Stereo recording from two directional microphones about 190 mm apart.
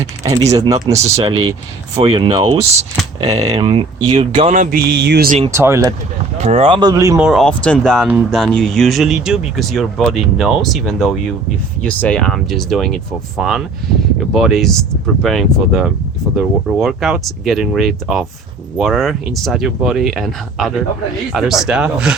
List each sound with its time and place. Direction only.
0.5 s speech: 20° right (ahead or behind); by 4.8 s 40° right (ahead or behind)
4.9 s speech: 60° right (ahead or behind)
5.5 s speech: 15° right (ahead or behind)
6.4 s speech: 30° right (ahead or behind); by 7.2 s 15° right (ahead or behind)
7.2 s speech: centre (ahead or behind)